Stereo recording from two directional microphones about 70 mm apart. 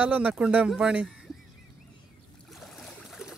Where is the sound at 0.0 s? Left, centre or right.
Right; by 1.4 s centre.